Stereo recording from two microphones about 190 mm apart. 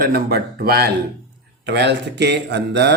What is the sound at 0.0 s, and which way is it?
Speech, 55° right (ahead or behind).